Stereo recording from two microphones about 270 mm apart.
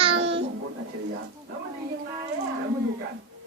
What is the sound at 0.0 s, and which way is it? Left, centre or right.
Babbling, right.